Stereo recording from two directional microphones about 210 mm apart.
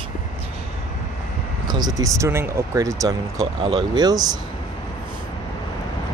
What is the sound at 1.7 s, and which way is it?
Speech, 20° right (ahead or behind).